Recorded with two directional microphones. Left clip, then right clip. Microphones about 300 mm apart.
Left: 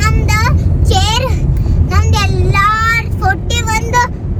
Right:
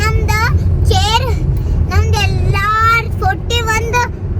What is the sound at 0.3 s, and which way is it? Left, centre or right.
Vehicle, centre.